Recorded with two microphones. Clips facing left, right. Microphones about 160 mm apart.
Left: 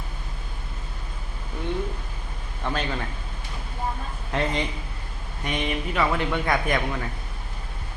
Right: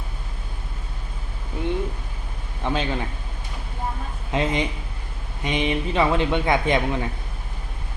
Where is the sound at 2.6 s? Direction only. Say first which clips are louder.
Right 4 dB; 20° right (ahead or behind).